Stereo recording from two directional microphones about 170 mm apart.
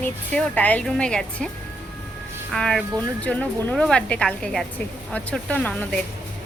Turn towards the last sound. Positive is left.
turn(degrees=5)  # may be behind; listen again after turning